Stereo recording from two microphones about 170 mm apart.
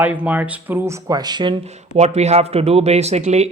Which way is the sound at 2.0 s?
40° right (ahead or behind).